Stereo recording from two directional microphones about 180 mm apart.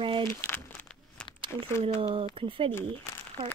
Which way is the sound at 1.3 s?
30° right (ahead or behind).